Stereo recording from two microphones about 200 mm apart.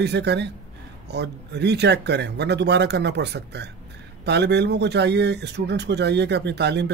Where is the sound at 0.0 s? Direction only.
60° right (ahead or behind).